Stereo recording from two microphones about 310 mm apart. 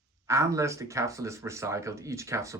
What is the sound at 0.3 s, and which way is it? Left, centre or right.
Speech, centre.